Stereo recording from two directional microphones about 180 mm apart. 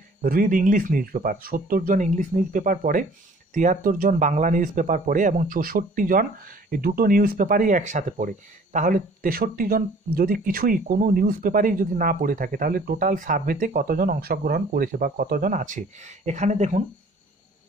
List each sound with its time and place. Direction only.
0.2 s a man's voice: 50° right (ahead or behind)